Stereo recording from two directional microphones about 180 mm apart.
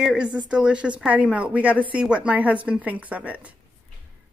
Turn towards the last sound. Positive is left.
turn(degrees=-10)  # may be behind; listen again after turning